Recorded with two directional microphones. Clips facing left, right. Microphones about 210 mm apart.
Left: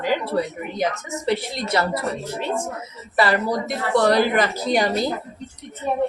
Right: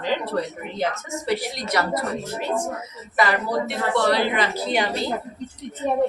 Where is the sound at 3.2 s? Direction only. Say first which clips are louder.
Left 2 dB; 35° left (ahead or behind).